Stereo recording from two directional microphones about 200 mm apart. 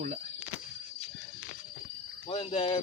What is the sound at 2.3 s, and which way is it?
Speech, 30° left (ahead or behind).